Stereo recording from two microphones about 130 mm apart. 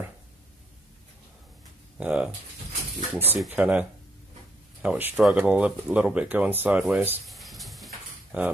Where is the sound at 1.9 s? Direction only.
10° right (ahead or behind).